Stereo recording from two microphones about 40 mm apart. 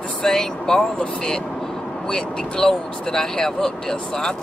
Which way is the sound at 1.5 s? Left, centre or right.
Centre.